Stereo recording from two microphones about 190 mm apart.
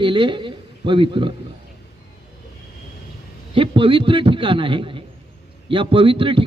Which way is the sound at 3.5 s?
25° right (ahead or behind).